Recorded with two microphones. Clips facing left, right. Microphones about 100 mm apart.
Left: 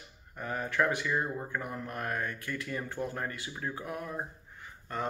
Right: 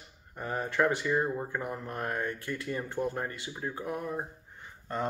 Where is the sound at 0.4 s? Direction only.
25° right (ahead or behind).